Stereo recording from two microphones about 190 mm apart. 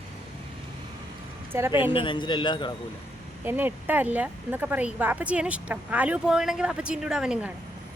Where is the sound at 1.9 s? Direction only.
25° left (ahead or behind).